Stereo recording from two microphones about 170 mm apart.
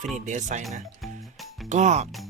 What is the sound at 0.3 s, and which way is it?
Speech, 45° right (ahead or behind).